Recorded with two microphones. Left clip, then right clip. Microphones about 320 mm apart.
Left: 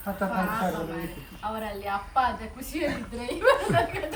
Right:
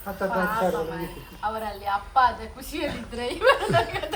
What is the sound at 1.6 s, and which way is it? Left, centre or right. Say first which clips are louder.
Speech: right 3 dB; right.